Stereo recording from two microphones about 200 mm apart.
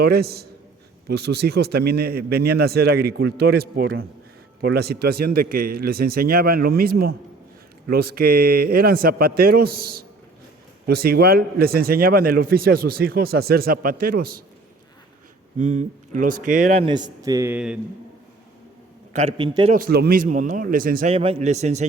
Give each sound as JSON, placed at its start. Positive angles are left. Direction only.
{"t": 0.0, "sound": "speech", "side_deg": -50}
{"t": 15.5, "sound": "a man's voice", "side_deg": -35}
{"t": 16.8, "sound": "speech", "side_deg": -20}
{"t": 19.1, "sound": "a man's voice", "side_deg": -25}
{"t": 19.7, "sound": "speech", "side_deg": -50}
{"t": 21.1, "sound": "a man's voice", "side_deg": -30}